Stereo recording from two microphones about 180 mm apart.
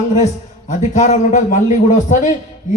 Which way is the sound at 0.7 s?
40° left (ahead or behind).